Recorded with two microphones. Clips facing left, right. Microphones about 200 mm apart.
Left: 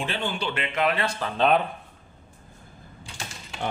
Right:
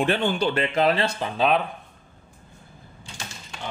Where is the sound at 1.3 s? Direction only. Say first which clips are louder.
Left 1 dB; centre (ahead or behind).